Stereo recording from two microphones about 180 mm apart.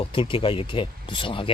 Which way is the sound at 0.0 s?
30° left (ahead or behind).